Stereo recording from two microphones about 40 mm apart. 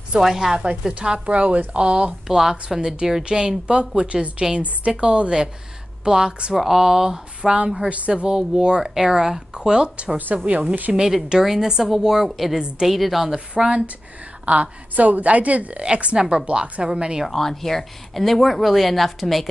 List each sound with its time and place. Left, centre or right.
0.2 s speech: centre
0.9 s a woman's voice: right
2.2 s speech: centre
3.3 s a woman's voice: right
10.9 s speech: centre
12.3 s speech: centre
14.4 s a woman's voice: right
17.3 s speech: centre